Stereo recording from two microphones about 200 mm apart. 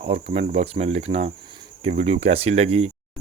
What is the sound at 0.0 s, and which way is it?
Speech, 30° right (ahead or behind).